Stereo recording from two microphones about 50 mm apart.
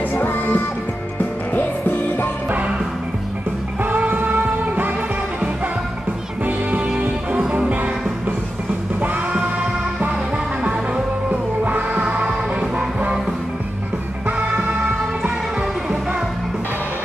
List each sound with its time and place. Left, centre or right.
0.1 s music: left
4.1 s music: right
7.0 s music: right
11.2 s music: right